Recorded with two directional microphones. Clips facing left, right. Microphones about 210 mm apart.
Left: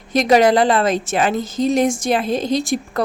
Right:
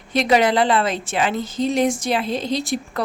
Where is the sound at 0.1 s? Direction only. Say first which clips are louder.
Left 4 dB; 45° left (ahead or behind).